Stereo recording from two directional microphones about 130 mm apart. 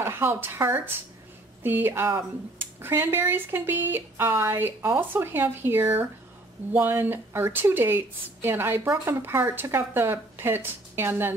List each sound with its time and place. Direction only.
0.0 s speech: 20° right (ahead or behind)